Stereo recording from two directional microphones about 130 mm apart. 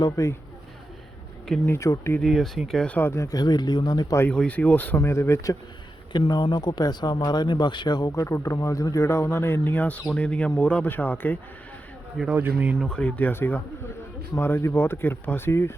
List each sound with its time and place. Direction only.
0.0 s speech: 25° left (ahead or behind)
1.6 s speech: 20° left (ahead or behind)
2.1 s speech: centre (ahead or behind); by 4.2 s 30° left (ahead or behind)
4.2 s speech: 10° left (ahead or behind)
12.1 s speech: 5° right (ahead or behind)
12.9 s speech: 10° left (ahead or behind)